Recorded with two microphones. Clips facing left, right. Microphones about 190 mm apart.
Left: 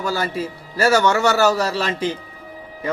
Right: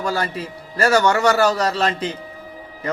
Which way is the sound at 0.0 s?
5° left (ahead or behind).